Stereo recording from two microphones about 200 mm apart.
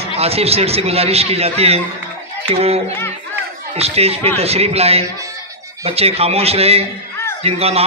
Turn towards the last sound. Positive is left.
turn(degrees=-30)  # may be behind; listen again after turning